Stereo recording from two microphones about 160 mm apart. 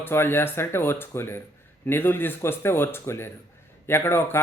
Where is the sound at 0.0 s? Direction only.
15° left (ahead or behind).